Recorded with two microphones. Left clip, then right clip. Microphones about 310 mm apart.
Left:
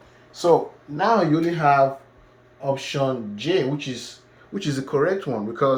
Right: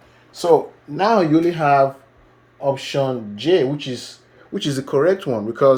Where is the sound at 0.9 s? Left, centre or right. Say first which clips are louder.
Right 4 dB; right.